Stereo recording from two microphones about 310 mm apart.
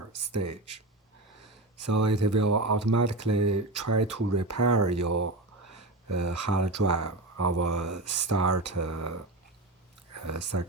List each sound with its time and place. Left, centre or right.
0.3 s speech: right
1.9 s speech: right